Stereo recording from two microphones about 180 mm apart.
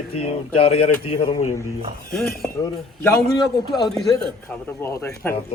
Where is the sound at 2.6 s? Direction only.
15° left (ahead or behind).